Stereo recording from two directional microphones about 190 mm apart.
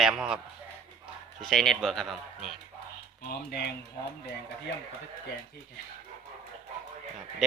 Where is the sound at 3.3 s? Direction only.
55° left (ahead or behind).